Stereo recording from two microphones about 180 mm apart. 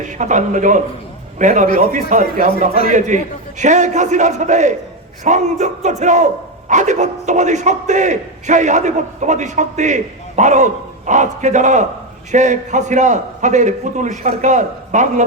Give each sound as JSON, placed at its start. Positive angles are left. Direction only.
{"t": 0.2, "sound": "a man's voice", "side_deg": -45}